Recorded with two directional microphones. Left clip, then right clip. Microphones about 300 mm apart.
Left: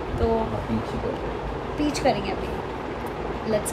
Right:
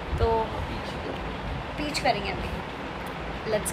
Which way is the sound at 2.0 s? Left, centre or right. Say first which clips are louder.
Left 2 dB; centre.